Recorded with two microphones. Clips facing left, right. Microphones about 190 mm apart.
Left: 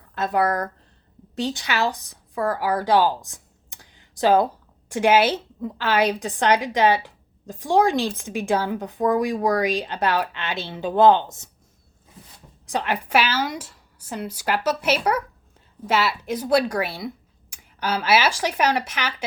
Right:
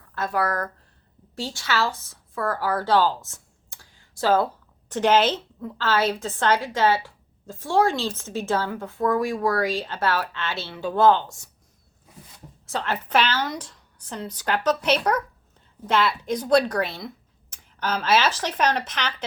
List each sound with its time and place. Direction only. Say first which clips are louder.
0.1 s a woman's voice: left 4 dB; 20° left (ahead or behind)
12.6 s a woman's voice: left 3 dB; 15° left (ahead or behind)